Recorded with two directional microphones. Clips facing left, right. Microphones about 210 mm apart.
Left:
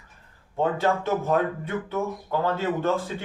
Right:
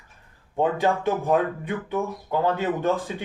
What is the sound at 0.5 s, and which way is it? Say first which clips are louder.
Speech: right 1 dB; 15° right (ahead or behind).